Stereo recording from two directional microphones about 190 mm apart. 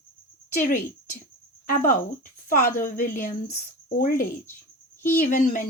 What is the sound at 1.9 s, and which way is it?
A woman's voice, 45° left (ahead or behind).